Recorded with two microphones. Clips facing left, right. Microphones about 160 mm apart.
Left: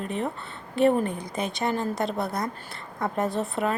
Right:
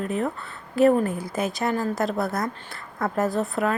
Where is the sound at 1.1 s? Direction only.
5° right (ahead or behind).